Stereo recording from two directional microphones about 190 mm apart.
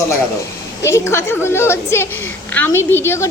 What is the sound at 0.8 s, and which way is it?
A woman's voice, 15° left (ahead or behind).